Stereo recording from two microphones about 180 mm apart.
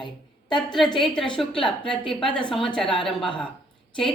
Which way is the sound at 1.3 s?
5° left (ahead or behind).